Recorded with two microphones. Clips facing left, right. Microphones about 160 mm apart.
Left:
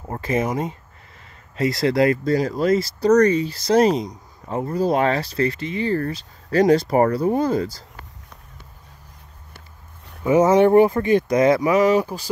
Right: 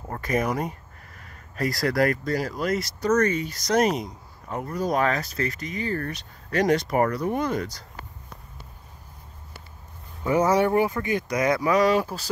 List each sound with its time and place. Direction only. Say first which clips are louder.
0.1 s speech: left 3 dB; 25° left (ahead or behind)
10.2 s speech: left 6 dB; 20° left (ahead or behind)